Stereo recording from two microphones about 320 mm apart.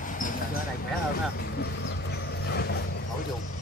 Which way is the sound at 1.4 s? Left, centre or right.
Left.